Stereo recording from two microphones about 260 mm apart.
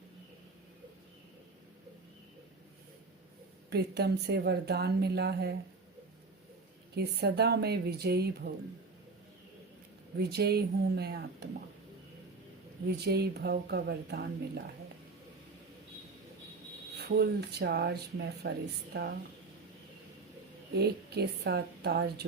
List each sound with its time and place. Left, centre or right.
3.7 s speech: right
6.9 s speech: right
10.2 s speech: right
12.9 s speech: right
17.0 s speech: right
20.7 s speech: right